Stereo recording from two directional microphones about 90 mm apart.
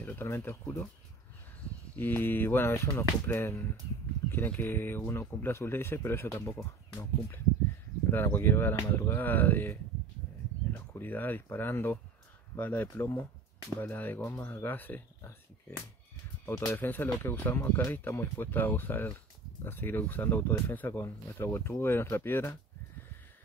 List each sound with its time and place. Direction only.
0.0 s speech: 25° left (ahead or behind)
2.0 s speech: 20° left (ahead or behind)
11.0 s speech: 20° left (ahead or behind)
16.7 s speech: 20° left (ahead or behind)